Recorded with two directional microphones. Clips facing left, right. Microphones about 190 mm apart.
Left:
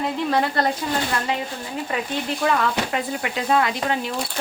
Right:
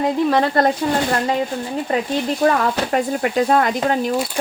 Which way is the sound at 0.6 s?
50° right (ahead or behind).